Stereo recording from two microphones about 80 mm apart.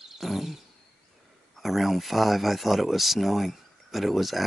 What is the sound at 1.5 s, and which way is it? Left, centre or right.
Speech, centre.